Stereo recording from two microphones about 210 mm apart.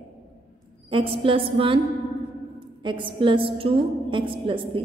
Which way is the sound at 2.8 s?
25° right (ahead or behind).